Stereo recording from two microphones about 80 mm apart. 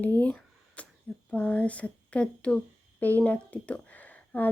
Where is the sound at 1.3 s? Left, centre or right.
Centre.